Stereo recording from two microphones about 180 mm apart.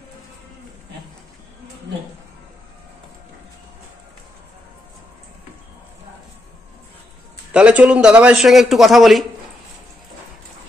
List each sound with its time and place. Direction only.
7.5 s a man's voice: 5° right (ahead or behind)